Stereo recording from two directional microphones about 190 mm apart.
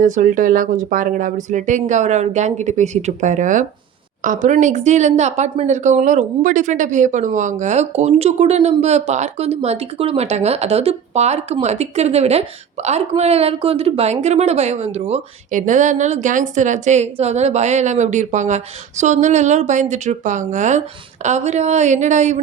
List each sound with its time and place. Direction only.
0.0 s speech: 40° right (ahead or behind)